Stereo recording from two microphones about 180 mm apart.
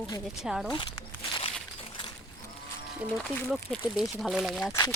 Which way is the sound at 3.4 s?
5° right (ahead or behind).